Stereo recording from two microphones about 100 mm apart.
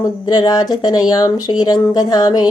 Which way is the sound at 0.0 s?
40° left (ahead or behind).